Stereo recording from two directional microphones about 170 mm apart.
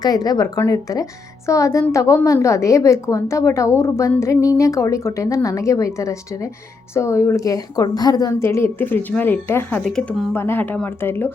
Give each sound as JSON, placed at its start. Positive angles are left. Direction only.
{"t": 0.0, "sound": "a woman's voice", "side_deg": 20}
{"t": 9.8, "sound": "speech", "side_deg": 0}
{"t": 10.3, "sound": "a woman's voice", "side_deg": 15}